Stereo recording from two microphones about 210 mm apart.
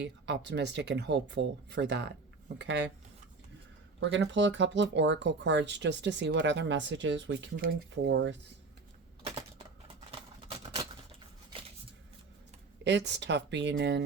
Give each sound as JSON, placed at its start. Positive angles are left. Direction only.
{"t": 0.0, "sound": "speech", "side_deg": -55}
{"t": 4.0, "sound": "speech", "side_deg": -60}
{"t": 12.8, "sound": "speech", "side_deg": -55}